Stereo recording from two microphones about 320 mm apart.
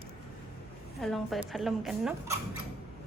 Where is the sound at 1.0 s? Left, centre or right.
Centre.